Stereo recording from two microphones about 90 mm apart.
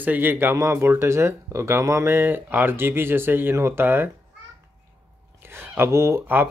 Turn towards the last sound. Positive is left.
turn(degrees=-25)  # may be behind; listen again after turning